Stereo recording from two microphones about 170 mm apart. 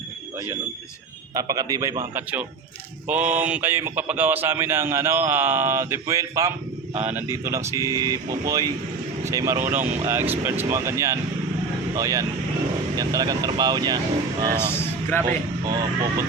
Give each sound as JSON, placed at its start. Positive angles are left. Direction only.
{"t": 1.3, "sound": "speech", "side_deg": -20}
{"t": 9.8, "sound": "speech", "side_deg": -40}
{"t": 10.1, "sound": "speech", "side_deg": -15}
{"t": 14.7, "sound": "a sound", "side_deg": 15}
{"t": 15.6, "sound": "speech", "side_deg": -20}